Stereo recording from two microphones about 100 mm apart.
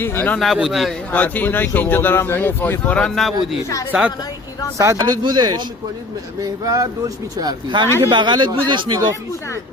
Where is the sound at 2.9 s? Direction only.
5° left (ahead or behind).